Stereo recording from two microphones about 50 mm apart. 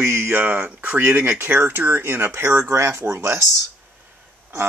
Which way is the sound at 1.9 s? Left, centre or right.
Right.